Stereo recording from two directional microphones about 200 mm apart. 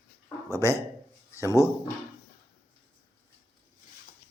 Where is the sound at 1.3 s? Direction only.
15° left (ahead or behind).